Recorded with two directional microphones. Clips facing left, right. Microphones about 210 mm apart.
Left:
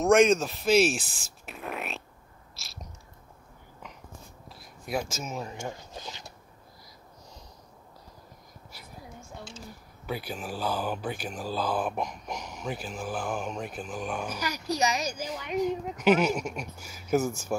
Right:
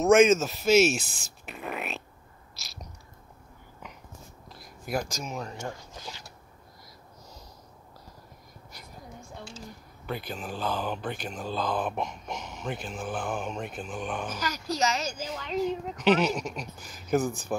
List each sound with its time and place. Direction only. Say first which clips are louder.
0.0 s speech: right 1 dB; centre (ahead or behind)
1.4 s a sound: right 1 dB; centre (ahead or behind)
4.5 s speech: right 1 dB; centre (ahead or behind); by 6.3 s 20° left (ahead or behind)
10.0 s speech: even; 5° left (ahead or behind)